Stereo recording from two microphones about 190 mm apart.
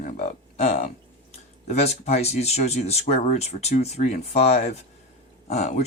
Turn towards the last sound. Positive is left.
turn(degrees=35)  # may be behind; listen again after turning